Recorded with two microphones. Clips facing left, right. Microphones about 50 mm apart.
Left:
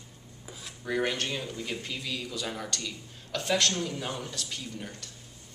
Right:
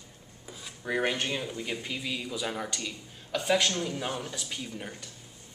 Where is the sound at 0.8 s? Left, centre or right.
Centre.